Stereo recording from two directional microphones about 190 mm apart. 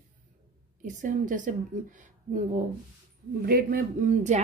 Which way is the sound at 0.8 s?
40° right (ahead or behind).